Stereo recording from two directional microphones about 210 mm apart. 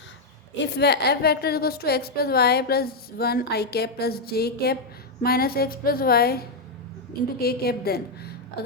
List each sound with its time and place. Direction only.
0.5 s a woman's voice: 55° left (ahead or behind)